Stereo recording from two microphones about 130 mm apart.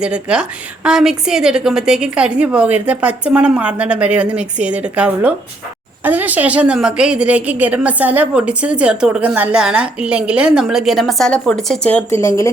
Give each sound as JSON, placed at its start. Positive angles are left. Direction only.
{"t": 0.0, "sound": "a woman's voice", "side_deg": -10}